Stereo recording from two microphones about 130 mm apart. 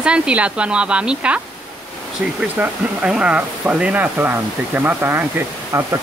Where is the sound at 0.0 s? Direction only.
10° right (ahead or behind).